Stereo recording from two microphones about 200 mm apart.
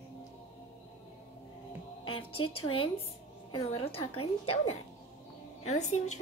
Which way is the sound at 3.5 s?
30° left (ahead or behind).